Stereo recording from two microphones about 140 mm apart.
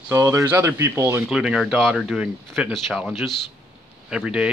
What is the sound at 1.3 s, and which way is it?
Speech, 5° right (ahead or behind).